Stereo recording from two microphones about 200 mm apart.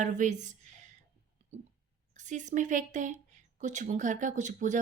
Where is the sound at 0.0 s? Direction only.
40° right (ahead or behind).